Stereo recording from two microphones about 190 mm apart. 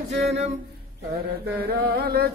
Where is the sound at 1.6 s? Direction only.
55° right (ahead or behind).